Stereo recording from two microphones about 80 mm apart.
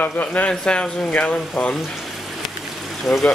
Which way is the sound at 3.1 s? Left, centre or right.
Centre.